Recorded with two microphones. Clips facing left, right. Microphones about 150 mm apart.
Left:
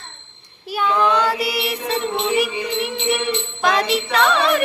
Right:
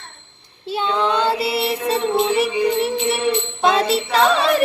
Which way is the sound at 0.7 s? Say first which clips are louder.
Left 1 dB; 25° right (ahead or behind).